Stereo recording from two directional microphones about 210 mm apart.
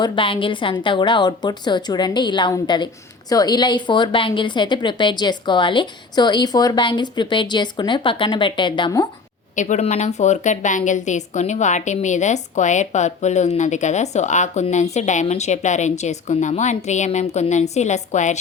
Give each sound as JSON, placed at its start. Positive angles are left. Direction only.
{"t": 0.0, "sound": "a woman's voice", "side_deg": 25}
{"t": 9.6, "sound": "a woman's voice", "side_deg": 35}